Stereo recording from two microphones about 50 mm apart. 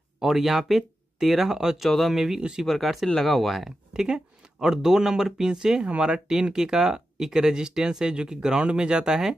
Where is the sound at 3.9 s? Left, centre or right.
Centre.